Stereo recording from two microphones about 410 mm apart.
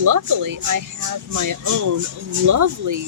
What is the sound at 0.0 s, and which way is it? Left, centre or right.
Speech, right.